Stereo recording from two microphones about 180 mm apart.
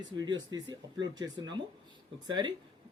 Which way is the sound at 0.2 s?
20° right (ahead or behind).